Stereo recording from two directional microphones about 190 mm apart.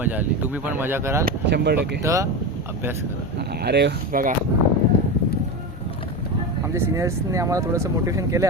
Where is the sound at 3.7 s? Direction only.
60° right (ahead or behind).